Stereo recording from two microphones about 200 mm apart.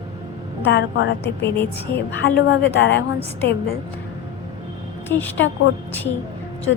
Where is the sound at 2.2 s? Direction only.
65° left (ahead or behind).